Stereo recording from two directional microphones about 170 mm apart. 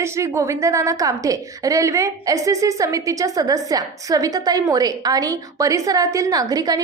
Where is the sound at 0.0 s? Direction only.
15° right (ahead or behind).